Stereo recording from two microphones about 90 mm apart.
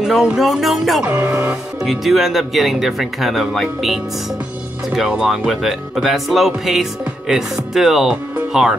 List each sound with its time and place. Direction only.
0.0 s music: 5° right (ahead or behind)
1.0 s music: 20° right (ahead or behind)
1.4 s speech: 10° right (ahead or behind)